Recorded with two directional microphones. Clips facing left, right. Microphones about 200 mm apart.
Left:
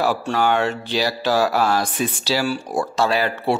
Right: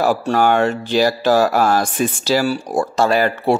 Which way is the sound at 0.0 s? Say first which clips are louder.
Right 4 dB; 45° right (ahead or behind).